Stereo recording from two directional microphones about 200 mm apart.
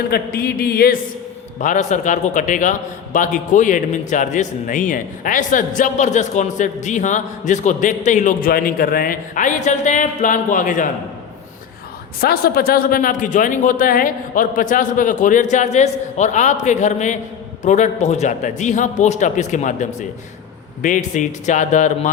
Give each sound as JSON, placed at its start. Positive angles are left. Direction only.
{"t": 0.1, "sound": "speech", "side_deg": 50}
{"t": 1.5, "sound": "a man's voice", "side_deg": 40}
{"t": 12.2, "sound": "a man's voice", "side_deg": 50}